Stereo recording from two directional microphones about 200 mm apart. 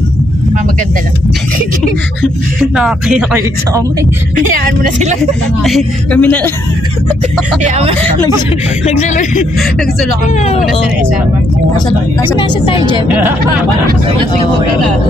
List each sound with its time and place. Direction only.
2.7 s music: 5° right (ahead or behind)
4.5 s speech: 40° right (ahead or behind)
5.6 s a man's voice: centre (ahead or behind)
12.4 s a woman's voice: 25° left (ahead or behind)
13.1 s speech: 10° right (ahead or behind)